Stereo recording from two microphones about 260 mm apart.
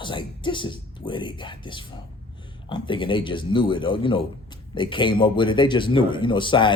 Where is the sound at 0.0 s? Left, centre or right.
Centre.